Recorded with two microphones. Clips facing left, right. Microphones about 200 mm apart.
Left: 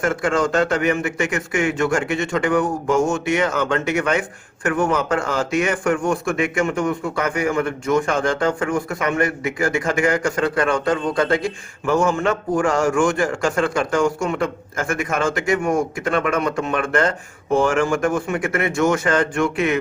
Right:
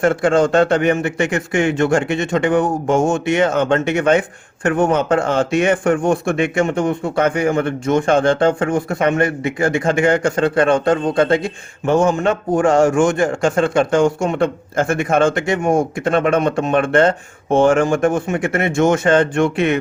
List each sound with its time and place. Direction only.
0.0 s a man's voice: 30° right (ahead or behind)